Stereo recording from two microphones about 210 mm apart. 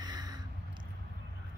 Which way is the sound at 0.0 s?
20° right (ahead or behind).